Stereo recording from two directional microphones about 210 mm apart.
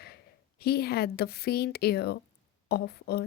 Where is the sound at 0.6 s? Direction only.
50° left (ahead or behind).